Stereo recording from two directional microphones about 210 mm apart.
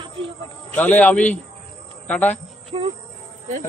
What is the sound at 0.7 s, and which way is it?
A man's voice, 10° left (ahead or behind).